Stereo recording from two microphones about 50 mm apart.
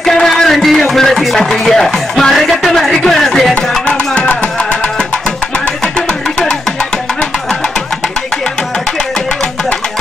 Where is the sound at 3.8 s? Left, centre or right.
Left.